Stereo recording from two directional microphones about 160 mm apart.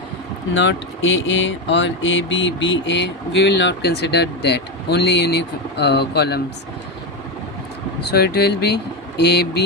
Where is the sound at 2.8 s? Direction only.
90° left.